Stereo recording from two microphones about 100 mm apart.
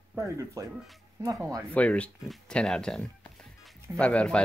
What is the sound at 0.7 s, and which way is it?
Speech, centre (ahead or behind).